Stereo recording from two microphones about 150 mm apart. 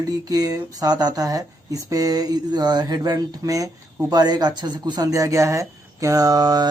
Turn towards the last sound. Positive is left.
turn(degrees=-25)  # may be behind; listen again after turning